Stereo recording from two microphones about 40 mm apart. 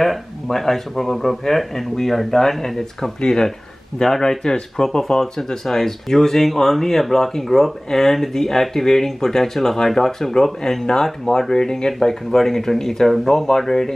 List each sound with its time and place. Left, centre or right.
0.5 s speech: centre